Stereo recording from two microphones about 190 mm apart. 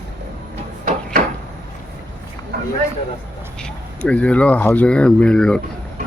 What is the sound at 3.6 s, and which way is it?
Speech, 5° left (ahead or behind).